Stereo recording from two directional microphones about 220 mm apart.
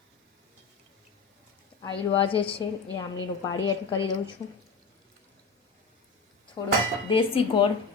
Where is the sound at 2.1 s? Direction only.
25° left (ahead or behind).